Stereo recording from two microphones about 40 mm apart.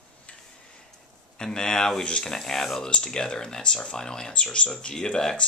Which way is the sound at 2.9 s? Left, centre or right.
Centre.